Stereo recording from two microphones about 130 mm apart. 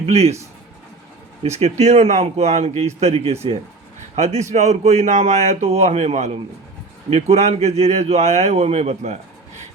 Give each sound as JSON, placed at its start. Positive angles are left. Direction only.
{"t": 0.0, "sound": "speech", "side_deg": -55}
{"t": 1.4, "sound": "speech", "side_deg": -55}